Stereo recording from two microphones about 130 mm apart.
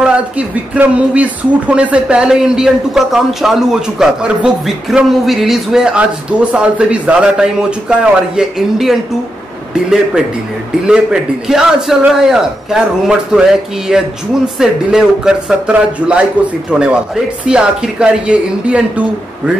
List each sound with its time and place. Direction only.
0.0 s a man's voice: 10° right (ahead or behind)
10.9 s a man's voice: 5° right (ahead or behind)